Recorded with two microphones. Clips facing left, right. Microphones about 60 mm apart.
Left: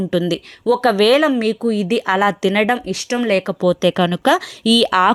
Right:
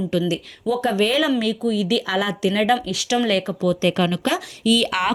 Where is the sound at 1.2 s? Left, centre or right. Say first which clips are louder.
Left 4 dB; left.